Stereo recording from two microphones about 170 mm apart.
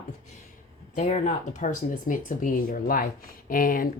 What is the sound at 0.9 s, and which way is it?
A woman's voice, 40° left (ahead or behind).